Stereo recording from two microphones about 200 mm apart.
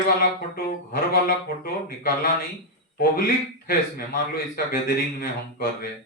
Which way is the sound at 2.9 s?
50° left (ahead or behind).